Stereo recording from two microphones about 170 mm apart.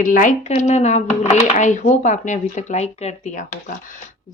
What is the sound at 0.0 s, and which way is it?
Speech, 50° left (ahead or behind).